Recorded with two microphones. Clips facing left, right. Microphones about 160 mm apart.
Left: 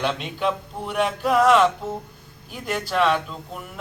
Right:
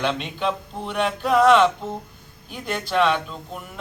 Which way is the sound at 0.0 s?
5° left (ahead or behind).